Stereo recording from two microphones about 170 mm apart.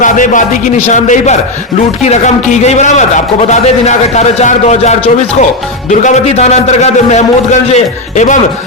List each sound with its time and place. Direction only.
0.0 s a man's voice: 50° left (ahead or behind)